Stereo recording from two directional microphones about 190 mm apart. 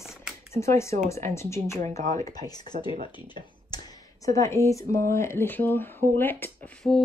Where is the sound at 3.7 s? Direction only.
20° left (ahead or behind).